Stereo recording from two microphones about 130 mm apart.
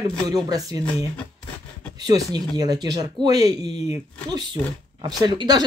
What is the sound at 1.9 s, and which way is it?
Speech, 30° right (ahead or behind).